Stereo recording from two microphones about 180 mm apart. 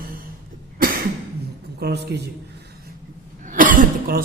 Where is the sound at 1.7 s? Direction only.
65° right (ahead or behind).